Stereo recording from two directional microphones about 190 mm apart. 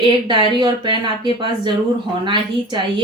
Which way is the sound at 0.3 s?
25° right (ahead or behind).